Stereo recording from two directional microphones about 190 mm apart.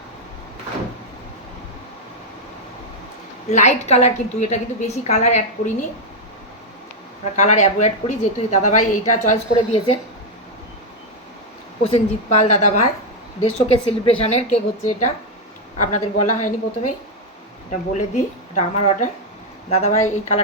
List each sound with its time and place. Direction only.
3.5 s speech: 40° left (ahead or behind)
7.3 s speech: 35° left (ahead or behind)
11.8 s speech: 35° left (ahead or behind)